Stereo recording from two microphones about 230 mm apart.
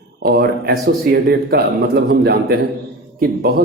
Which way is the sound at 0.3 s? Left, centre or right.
Right.